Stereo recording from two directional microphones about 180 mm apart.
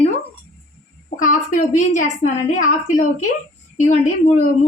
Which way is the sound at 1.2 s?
45° left (ahead or behind).